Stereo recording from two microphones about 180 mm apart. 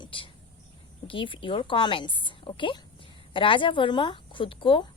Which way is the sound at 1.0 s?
30° left (ahead or behind).